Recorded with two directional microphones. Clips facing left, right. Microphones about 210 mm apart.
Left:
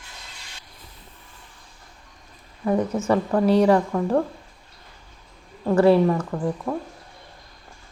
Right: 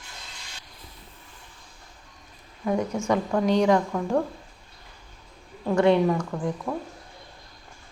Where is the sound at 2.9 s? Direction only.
5° left (ahead or behind).